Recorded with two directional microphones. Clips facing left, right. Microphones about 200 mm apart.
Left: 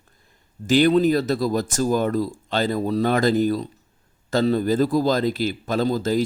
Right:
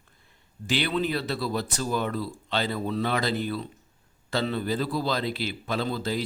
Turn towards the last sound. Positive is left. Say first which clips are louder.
# left 7 dB
turn(degrees=45)  # may be behind; listen again after turning